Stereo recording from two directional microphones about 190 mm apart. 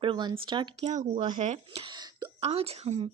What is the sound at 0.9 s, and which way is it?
Speech, 35° right (ahead or behind).